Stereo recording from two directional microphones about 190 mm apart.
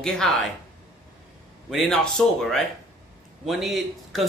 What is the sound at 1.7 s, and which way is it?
Speech, centre (ahead or behind).